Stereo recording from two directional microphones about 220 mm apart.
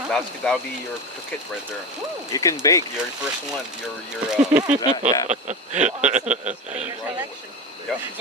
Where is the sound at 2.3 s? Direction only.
15° left (ahead or behind).